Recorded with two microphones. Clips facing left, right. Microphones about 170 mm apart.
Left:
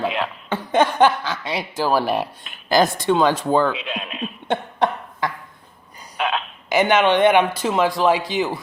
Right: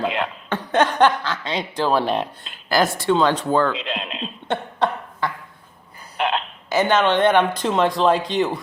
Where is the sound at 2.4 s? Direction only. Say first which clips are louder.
Left 3 dB; 15° left (ahead or behind).